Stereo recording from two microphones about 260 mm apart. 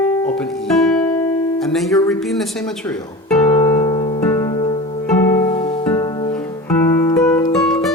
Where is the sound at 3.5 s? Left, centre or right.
Centre.